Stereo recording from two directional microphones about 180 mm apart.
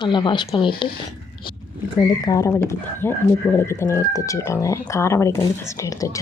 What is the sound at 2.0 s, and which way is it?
Speech, 20° left (ahead or behind).